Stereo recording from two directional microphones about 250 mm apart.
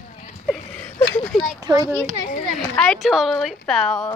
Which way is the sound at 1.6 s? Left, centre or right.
Centre.